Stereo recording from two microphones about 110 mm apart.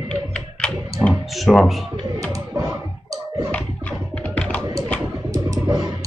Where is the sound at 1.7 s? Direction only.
Centre (ahead or behind).